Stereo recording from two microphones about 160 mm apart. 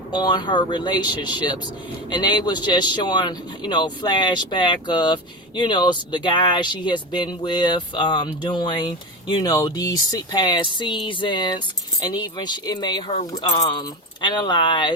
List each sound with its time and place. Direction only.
0.1 s speech: 25° left (ahead or behind)